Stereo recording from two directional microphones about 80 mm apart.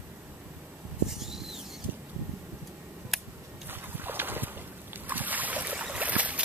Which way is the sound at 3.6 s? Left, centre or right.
Right.